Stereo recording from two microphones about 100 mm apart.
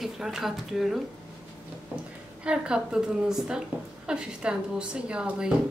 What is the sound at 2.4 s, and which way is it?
A woman's voice, 10° right (ahead or behind).